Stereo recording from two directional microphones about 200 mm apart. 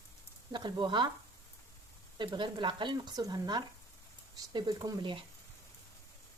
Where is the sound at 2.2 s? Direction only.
25° right (ahead or behind).